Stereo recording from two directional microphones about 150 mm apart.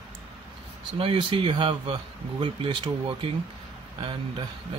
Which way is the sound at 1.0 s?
35° right (ahead or behind).